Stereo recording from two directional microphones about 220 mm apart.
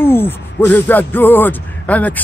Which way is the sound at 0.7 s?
10° left (ahead or behind).